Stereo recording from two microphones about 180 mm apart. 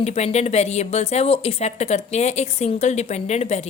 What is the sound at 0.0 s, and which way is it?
A woman's voice, 35° left (ahead or behind).